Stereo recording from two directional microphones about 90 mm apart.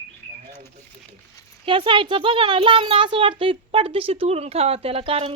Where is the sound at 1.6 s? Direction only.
70° right (ahead or behind); by 5.3 s 90° right.